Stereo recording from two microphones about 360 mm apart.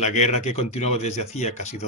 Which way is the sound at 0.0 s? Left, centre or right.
Centre.